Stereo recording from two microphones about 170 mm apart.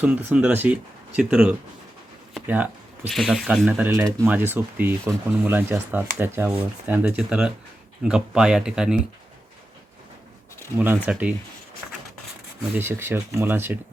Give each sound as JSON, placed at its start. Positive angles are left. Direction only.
{"t": 0.0, "sound": "speech", "side_deg": -10}
{"t": 2.5, "sound": "a sound", "side_deg": -10}
{"t": 3.1, "sound": "speech", "side_deg": 0}
{"t": 3.9, "sound": "speech", "side_deg": -15}
{"t": 10.8, "sound": "speech", "side_deg": -10}
{"t": 12.7, "sound": "speech", "side_deg": -15}